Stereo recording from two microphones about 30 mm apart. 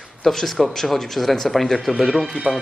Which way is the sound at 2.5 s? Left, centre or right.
Right.